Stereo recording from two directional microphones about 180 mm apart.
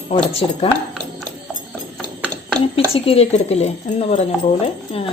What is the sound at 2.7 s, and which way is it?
Speech, 30° left (ahead or behind).